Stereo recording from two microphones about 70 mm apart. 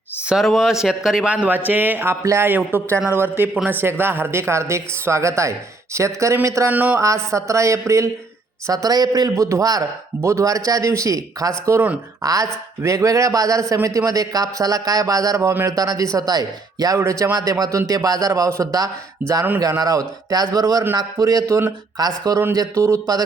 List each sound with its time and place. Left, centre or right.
0.4 s a man's voice: centre
1.3 s speech: right
2.0 s speech: right
2.5 s a woman's voice: right
6.7 s speech: right
7.0 s speech: right
8.6 s a man's voice: right
17.0 s speech: right
17.3 s a man's voice: right
19.2 s speech: right
19.5 s a man's voice: right
21.9 s a man's voice: right